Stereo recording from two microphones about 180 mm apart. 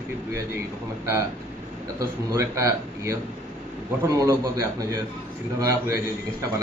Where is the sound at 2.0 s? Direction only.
20° right (ahead or behind).